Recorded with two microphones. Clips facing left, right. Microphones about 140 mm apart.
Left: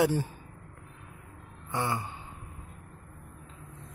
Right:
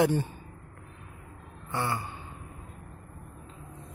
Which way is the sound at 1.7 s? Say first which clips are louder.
Even; 15° left (ahead or behind).